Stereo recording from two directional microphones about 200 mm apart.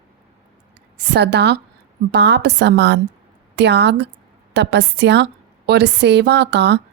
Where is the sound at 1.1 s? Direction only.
55° right (ahead or behind).